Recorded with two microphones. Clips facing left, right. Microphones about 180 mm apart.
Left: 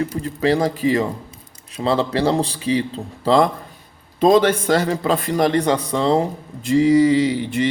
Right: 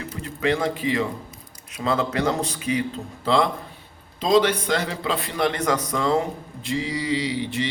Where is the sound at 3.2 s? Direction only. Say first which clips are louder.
Left 5 dB; 40° left (ahead or behind).